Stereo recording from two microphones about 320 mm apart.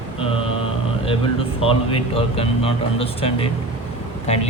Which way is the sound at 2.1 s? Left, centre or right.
Centre.